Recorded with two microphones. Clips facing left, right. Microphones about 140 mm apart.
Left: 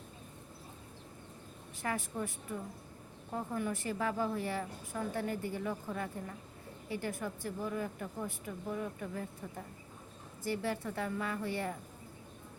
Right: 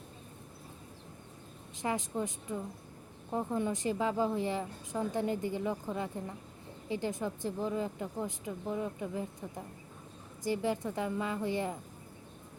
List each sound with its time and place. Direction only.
1.8 s a woman's voice: 20° right (ahead or behind)